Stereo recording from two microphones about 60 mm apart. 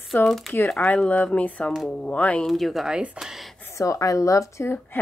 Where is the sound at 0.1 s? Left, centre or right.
Left.